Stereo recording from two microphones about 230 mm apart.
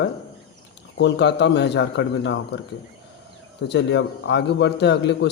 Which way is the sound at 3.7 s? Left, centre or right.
Left.